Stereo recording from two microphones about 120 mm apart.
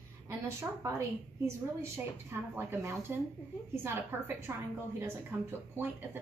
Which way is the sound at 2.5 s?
20° right (ahead or behind).